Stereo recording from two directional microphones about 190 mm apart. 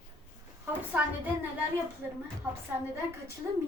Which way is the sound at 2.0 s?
10° right (ahead or behind).